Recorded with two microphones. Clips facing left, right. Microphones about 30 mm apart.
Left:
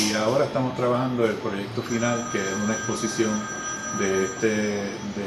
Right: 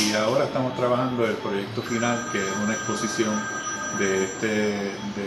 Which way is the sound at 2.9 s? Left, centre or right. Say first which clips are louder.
Even; centre.